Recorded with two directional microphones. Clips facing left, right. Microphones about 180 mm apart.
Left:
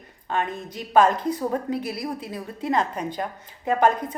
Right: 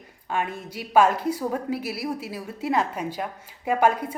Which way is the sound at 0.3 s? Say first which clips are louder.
Left 1 dB; 10° right (ahead or behind).